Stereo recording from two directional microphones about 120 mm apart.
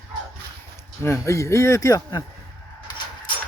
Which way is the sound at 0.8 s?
20° left (ahead or behind).